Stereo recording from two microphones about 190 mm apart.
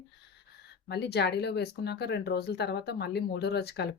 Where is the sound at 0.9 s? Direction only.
60° left (ahead or behind).